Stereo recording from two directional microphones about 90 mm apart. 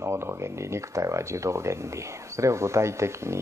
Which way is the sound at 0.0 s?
30° right (ahead or behind).